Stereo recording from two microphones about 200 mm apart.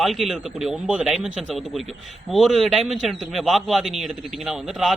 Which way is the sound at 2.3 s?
Centre (ahead or behind).